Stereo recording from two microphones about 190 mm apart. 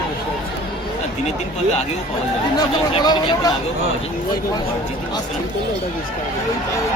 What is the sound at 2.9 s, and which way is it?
Speech, 20° left (ahead or behind).